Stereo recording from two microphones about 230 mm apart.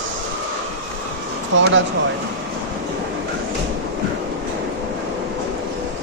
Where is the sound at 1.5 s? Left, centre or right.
Right.